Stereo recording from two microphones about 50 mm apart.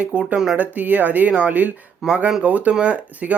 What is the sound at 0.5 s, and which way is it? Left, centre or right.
Speech, right.